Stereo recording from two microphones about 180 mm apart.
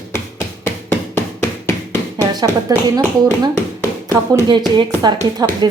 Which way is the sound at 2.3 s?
20° right (ahead or behind).